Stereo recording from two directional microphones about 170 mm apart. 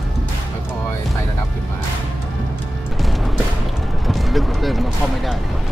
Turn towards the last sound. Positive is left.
turn(degrees=0)  # may be behind; listen again after turning